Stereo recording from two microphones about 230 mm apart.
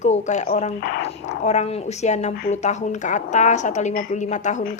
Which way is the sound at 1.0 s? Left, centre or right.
Left.